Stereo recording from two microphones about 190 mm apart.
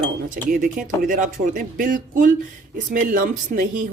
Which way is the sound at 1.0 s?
45° right (ahead or behind).